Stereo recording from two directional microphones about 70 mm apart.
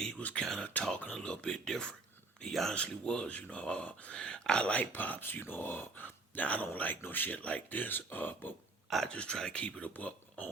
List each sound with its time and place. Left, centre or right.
0.2 s speech: left; by 2.7 s centre
2.7 s speech: centre
9.0 s speech: centre